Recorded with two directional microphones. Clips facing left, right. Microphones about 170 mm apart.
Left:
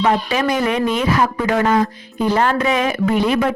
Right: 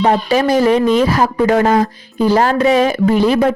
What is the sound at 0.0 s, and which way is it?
Speech, 35° right (ahead or behind).